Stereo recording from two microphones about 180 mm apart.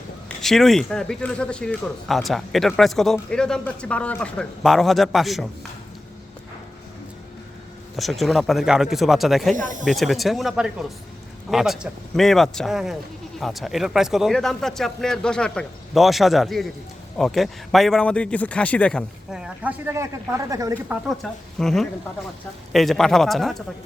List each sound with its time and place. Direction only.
0.3 s speech: centre (ahead or behind)
7.9 s speech: centre (ahead or behind); by 20.7 s 20° right (ahead or behind)
20.9 s speech: centre (ahead or behind)